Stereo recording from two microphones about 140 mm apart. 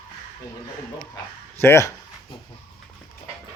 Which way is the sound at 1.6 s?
20° left (ahead or behind).